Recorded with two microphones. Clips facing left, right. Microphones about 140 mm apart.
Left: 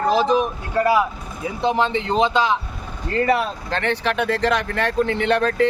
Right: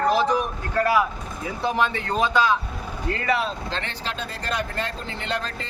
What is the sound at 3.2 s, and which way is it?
Speech, 55° left (ahead or behind).